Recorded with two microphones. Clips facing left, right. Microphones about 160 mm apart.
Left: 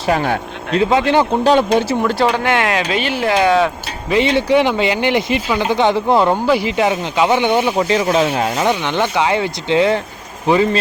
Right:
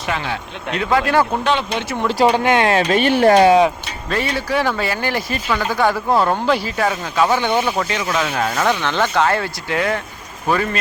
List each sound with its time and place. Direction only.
0.0 s a man's voice: 45° left (ahead or behind)
0.7 s speech: 25° left (ahead or behind)
1.5 s speech: 35° left (ahead or behind)
2.2 s speech: 20° right (ahead or behind)
2.7 s speech: 45° right (ahead or behind)
4.1 s speech: 20° left (ahead or behind)
6.4 s speech: 10° left (ahead or behind)
6.7 s speech: 20° left (ahead or behind)
7.9 s speech: 35° left (ahead or behind)